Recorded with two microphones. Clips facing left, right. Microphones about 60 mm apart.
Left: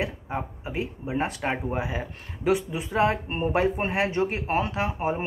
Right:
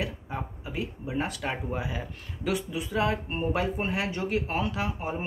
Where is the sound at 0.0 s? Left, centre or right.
Left.